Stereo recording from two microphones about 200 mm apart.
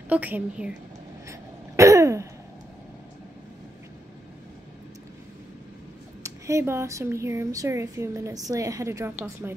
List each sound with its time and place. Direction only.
0.1 s speech: 10° right (ahead or behind)
1.3 s throat clearing: 15° right (ahead or behind)
6.2 s speech: 15° right (ahead or behind)